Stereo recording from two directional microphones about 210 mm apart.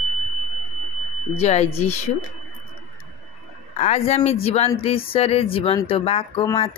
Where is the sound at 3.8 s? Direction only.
30° left (ahead or behind).